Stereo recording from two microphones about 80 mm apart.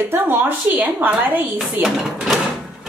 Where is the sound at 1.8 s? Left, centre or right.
Centre.